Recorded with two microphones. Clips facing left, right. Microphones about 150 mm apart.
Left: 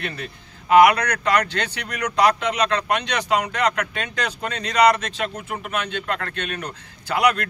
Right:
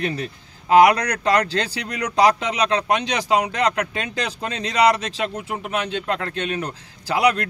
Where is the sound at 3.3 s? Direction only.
30° right (ahead or behind).